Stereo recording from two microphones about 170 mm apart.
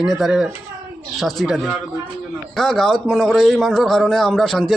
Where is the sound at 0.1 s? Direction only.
Centre (ahead or behind).